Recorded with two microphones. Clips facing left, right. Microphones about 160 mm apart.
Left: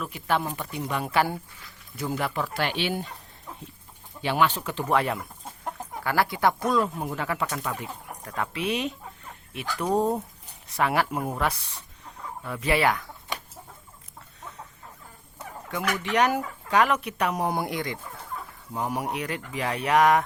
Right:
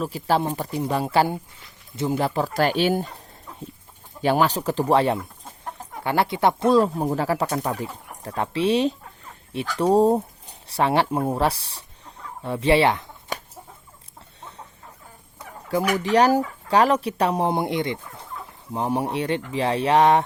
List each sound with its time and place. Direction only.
0.0 s speech: 35° right (ahead or behind)
4.2 s speech: 40° right (ahead or behind)
16.0 s speech: 35° right (ahead or behind)